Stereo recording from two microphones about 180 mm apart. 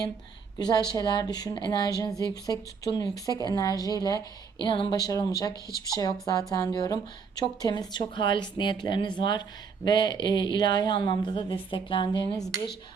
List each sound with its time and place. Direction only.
0.6 s speech: 20° left (ahead or behind)